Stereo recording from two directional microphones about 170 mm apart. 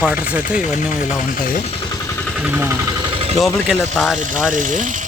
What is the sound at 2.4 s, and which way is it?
Speech, 10° right (ahead or behind).